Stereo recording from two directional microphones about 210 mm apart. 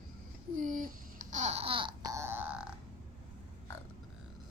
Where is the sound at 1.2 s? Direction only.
35° right (ahead or behind); by 2.6 s 10° right (ahead or behind).